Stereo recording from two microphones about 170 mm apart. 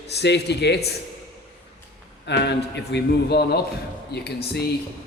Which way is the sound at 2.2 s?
90° left.